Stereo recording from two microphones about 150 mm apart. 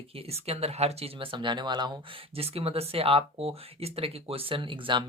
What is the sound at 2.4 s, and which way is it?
Speech, 40° right (ahead or behind).